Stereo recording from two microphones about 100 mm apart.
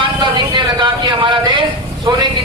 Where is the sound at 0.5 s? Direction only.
50° right (ahead or behind).